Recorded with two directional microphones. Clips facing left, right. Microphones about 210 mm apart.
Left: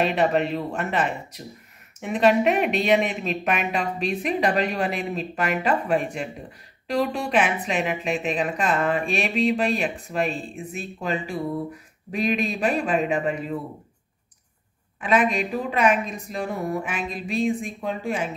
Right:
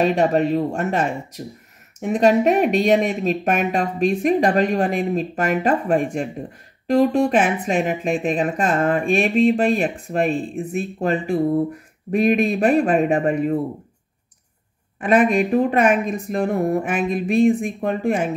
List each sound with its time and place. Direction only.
0.0 s speech: 45° right (ahead or behind)
15.0 s speech: 50° right (ahead or behind)